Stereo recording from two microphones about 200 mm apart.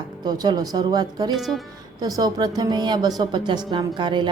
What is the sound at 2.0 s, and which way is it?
Speech, 20° right (ahead or behind).